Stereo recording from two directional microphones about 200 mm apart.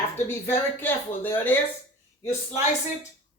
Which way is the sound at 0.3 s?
10° left (ahead or behind).